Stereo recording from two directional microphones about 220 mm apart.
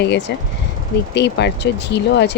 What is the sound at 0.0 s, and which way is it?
Speech, 50° left (ahead or behind).